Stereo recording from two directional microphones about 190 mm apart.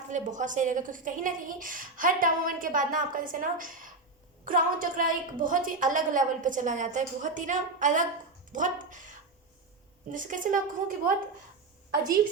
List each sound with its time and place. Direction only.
0.1 s a woman's voice: 40° right (ahead or behind)